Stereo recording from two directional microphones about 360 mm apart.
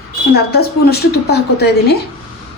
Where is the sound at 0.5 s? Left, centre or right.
Left.